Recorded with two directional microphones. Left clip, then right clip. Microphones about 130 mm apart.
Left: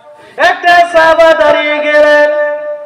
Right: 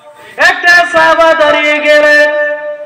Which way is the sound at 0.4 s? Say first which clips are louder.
Even; 10° right (ahead or behind).